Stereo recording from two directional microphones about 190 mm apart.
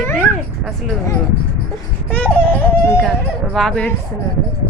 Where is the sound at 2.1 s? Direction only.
10° left (ahead or behind).